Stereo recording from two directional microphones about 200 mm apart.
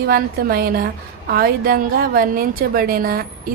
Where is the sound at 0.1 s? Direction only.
50° right (ahead or behind).